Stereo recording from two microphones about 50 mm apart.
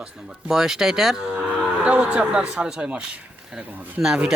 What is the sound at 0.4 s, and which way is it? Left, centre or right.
Speech, centre.